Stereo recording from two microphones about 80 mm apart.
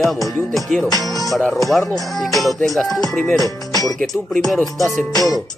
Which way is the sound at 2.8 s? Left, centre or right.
Centre.